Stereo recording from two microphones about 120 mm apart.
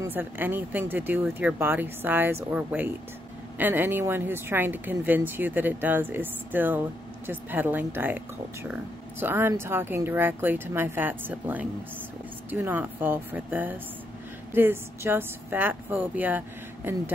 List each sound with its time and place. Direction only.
0.0 s speech: 15° right (ahead or behind)
9.2 s speech: 20° right (ahead or behind)